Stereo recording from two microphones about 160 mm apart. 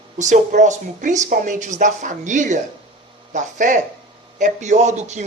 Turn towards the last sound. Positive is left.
turn(degrees=-45)  # may be behind; listen again after turning